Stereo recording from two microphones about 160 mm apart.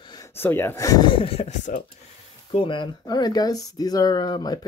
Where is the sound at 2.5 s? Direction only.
30° left (ahead or behind).